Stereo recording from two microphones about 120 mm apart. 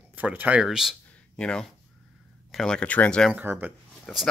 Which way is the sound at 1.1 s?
10° left (ahead or behind).